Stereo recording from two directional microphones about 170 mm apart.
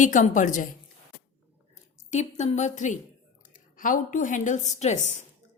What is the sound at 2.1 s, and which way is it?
A woman's voice, 40° left (ahead or behind).